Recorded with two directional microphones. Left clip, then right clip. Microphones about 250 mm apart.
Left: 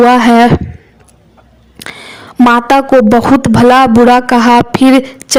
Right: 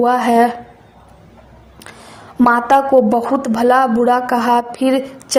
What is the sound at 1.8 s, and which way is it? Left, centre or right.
Speech, left.